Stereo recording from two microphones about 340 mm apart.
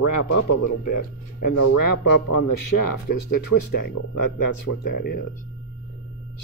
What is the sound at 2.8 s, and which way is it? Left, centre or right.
Speech, left.